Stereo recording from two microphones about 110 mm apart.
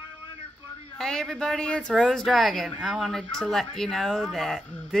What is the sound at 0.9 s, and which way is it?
Speech, 5° left (ahead or behind).